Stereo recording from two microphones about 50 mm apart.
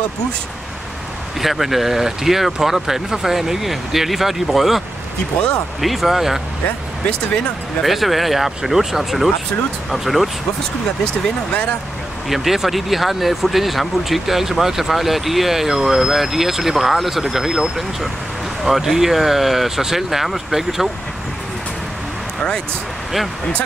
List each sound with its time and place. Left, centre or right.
1.4 s speech: centre
7.8 s speech: centre
12.3 s speech: centre